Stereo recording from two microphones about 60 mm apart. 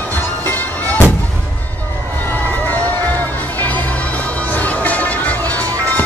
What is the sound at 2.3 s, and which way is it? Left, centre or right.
Music, left.